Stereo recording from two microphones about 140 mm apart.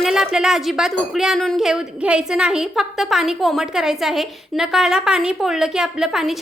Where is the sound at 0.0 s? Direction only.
5° right (ahead or behind).